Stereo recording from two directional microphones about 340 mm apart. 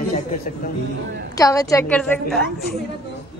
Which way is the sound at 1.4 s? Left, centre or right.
Centre.